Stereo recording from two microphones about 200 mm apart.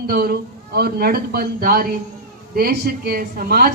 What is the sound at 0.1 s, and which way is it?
Speech, 50° right (ahead or behind).